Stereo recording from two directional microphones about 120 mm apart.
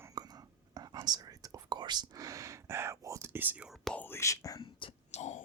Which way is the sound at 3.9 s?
20° left (ahead or behind).